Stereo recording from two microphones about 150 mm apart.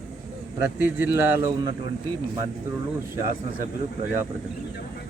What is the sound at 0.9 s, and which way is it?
Speech, 15° right (ahead or behind).